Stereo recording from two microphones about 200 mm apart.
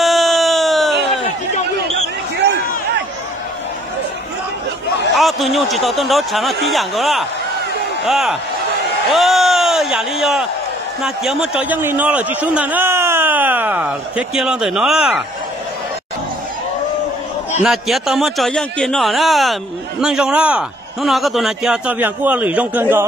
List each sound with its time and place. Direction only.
0.0 s a sound: centre (ahead or behind)
5.1 s a man's voice: centre (ahead or behind)
17.6 s a man's voice: centre (ahead or behind)